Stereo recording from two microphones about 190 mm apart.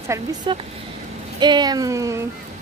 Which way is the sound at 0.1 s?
20° right (ahead or behind).